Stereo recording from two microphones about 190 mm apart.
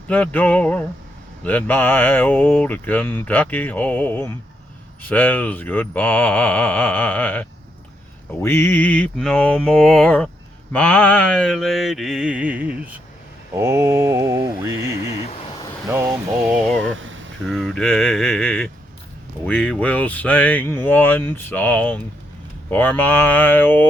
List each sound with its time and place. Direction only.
0.1 s mantra: 10° left (ahead or behind); by 14.8 s 15° right (ahead or behind)
15.2 s vehicle: 30° left (ahead or behind)
15.9 s mantra: 10° right (ahead or behind)
17.0 s a sound: 90° right
17.5 s mantra: centre (ahead or behind)